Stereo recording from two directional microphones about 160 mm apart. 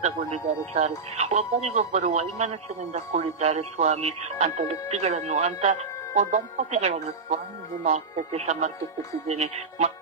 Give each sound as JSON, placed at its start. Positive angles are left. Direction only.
{"t": 0.0, "sound": "speech", "side_deg": -45}